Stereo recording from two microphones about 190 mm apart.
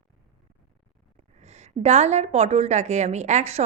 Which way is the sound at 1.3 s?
35° right (ahead or behind).